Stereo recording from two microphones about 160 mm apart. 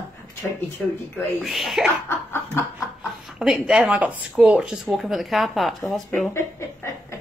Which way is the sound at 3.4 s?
5° right (ahead or behind).